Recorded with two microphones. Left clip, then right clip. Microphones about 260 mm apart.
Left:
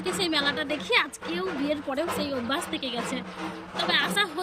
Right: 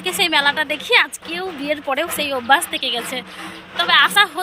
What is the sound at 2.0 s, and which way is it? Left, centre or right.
Speech, centre.